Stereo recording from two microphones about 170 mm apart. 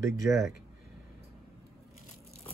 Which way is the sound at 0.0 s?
15° right (ahead or behind).